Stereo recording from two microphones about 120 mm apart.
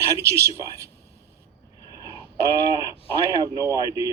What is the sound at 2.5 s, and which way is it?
Speech, 30° right (ahead or behind).